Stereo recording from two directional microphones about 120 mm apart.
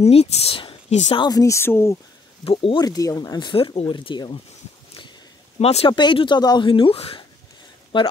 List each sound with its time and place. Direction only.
0.0 s speech: 60° left (ahead or behind)
1.1 s speech: 40° left (ahead or behind)
1.4 s speech: 20° left (ahead or behind)
2.4 s speech: 50° left (ahead or behind)
2.8 s speech: 30° left (ahead or behind)
5.6 s speech: 60° left (ahead or behind)
5.9 s speech: 40° left (ahead or behind)